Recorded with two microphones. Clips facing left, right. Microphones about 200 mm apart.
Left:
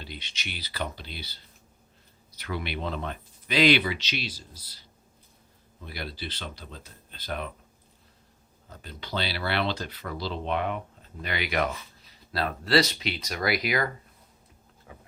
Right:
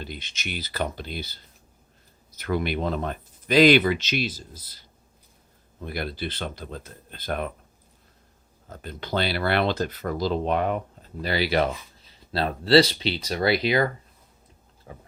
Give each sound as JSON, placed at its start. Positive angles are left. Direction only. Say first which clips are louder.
{"t": 0.0, "sound": "speech", "louder": "right 5 dB", "side_deg": -50}
{"t": 5.8, "sound": "speech", "louder": "right 7 dB", "side_deg": -50}
{"t": 8.7, "sound": "speech", "louder": "right 6 dB", "side_deg": -50}